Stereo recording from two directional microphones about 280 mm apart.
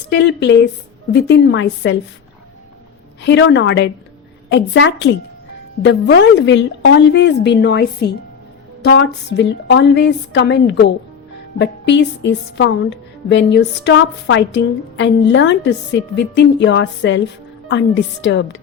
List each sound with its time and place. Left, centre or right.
0.1 s speech: left
3.2 s speech: left